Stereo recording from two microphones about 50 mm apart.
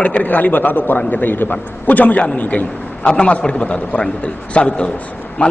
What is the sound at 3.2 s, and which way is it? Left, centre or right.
A man's voice, left.